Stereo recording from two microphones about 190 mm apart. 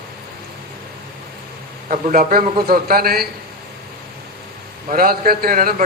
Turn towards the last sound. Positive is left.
turn(degrees=-50)  # may be behind; listen again after turning